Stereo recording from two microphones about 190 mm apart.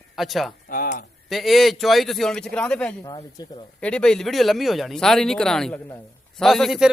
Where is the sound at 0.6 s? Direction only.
45° left (ahead or behind).